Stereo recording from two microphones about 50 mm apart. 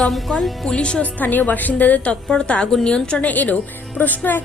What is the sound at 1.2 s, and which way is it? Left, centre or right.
Speech, left.